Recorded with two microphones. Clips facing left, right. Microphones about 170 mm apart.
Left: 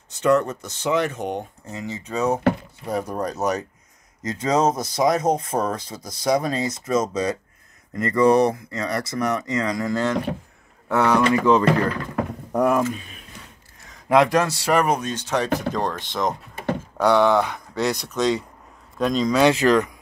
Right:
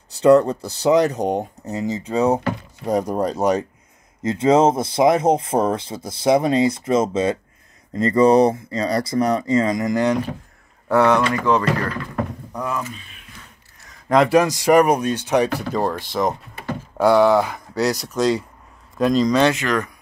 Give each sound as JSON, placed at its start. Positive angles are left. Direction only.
{"t": 0.2, "sound": "speech", "side_deg": -35}
{"t": 10.9, "sound": "speech", "side_deg": 0}
{"t": 12.5, "sound": "speech", "side_deg": 50}
{"t": 12.9, "sound": "a sound", "side_deg": 40}
{"t": 14.0, "sound": "a man's voice", "side_deg": 0}
{"t": 14.4, "sound": "speech", "side_deg": -15}
{"t": 19.5, "sound": "speech", "side_deg": 30}